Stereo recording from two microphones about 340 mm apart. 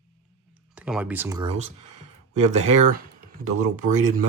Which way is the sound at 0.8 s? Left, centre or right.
Centre.